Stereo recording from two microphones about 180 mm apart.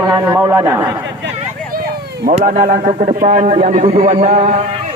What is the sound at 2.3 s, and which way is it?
Speech, 45° right (ahead or behind).